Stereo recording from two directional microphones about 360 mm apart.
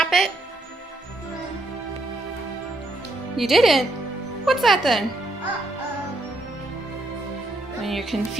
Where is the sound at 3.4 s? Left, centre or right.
Centre.